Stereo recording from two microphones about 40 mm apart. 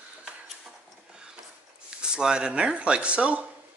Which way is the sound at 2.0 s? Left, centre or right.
Centre.